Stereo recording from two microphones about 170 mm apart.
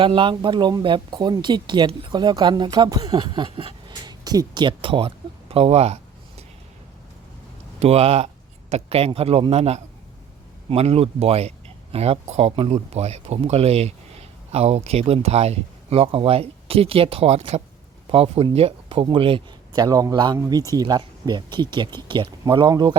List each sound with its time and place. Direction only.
0.0 s speech: 30° right (ahead or behind)
7.8 s a man's voice: 40° right (ahead or behind)